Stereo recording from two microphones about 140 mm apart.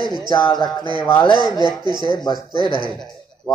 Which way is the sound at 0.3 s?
30° left (ahead or behind).